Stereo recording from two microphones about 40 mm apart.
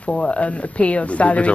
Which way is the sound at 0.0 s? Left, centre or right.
Left.